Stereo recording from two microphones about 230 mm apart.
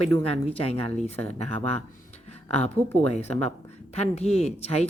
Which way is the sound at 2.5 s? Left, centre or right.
Left.